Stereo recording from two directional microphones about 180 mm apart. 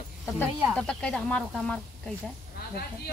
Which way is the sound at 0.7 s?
5° left (ahead or behind).